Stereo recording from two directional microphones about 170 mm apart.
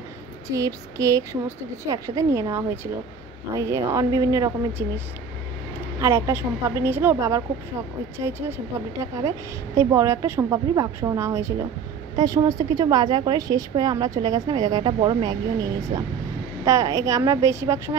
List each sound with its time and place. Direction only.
0.5 s a woman's voice: 20° right (ahead or behind)
9.8 s a woman's voice: 15° right (ahead or behind)